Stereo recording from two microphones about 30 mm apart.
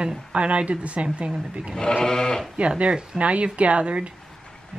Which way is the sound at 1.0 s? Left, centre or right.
Right.